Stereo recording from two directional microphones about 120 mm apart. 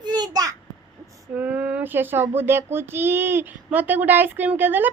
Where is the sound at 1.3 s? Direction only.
15° right (ahead or behind).